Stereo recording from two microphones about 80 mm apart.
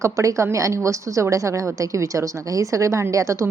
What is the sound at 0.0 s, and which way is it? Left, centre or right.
A woman's voice, right.